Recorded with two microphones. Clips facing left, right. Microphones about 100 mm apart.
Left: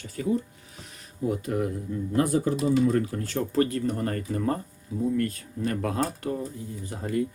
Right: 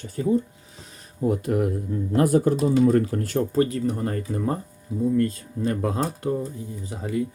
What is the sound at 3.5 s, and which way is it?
Speech, 15° right (ahead or behind).